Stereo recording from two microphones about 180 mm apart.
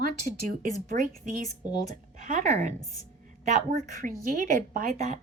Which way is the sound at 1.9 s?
45° right (ahead or behind).